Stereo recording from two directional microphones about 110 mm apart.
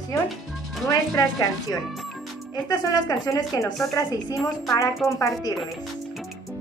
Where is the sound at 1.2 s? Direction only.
30° left (ahead or behind).